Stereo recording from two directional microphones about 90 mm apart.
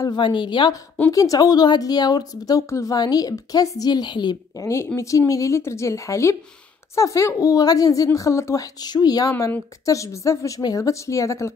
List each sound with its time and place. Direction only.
0.0 s a woman's voice: 60° left (ahead or behind)
1.1 s a woman's voice: 40° left (ahead or behind)
4.6 s a woman's voice: 35° left (ahead or behind)
8.7 s a woman's voice: 50° left (ahead or behind)
9.8 s a woman's voice: 35° left (ahead or behind)